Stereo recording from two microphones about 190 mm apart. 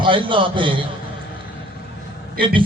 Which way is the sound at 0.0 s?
25° right (ahead or behind).